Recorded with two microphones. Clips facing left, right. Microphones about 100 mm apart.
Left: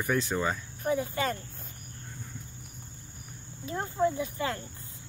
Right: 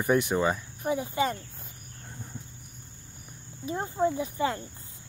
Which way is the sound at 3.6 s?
20° right (ahead or behind).